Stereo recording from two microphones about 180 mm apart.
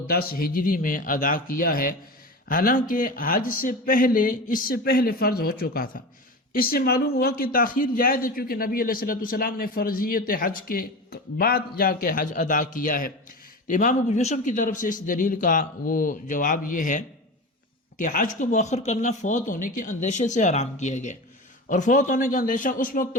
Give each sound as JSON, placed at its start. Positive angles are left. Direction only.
{"t": 0.1, "sound": "a man's voice", "side_deg": 55}
{"t": 18.0, "sound": "a man's voice", "side_deg": 45}